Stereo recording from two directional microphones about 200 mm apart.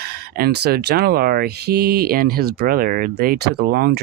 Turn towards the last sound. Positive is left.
turn(degrees=-50)  # may be behind; listen again after turning